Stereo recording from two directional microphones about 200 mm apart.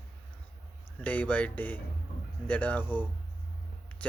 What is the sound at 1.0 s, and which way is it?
A man's voice, 5° left (ahead or behind).